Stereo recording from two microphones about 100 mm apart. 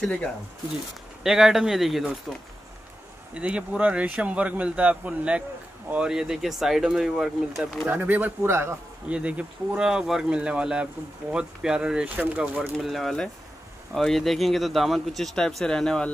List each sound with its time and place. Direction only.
1.2 s speech: 5° right (ahead or behind)
3.3 s speech: 10° right (ahead or behind)
7.9 s speech: 20° right (ahead or behind)
9.1 s speech: 15° right (ahead or behind)
12.7 s speech: centre (ahead or behind)